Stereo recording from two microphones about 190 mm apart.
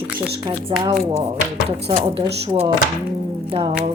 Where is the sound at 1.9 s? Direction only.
30° right (ahead or behind).